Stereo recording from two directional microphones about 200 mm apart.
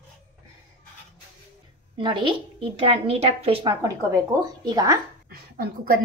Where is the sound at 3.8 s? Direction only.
20° right (ahead or behind).